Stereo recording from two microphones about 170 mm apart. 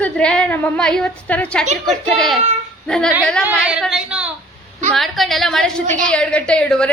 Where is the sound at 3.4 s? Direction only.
10° right (ahead or behind).